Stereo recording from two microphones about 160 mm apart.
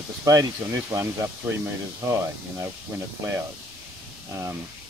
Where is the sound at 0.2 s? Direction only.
20° right (ahead or behind).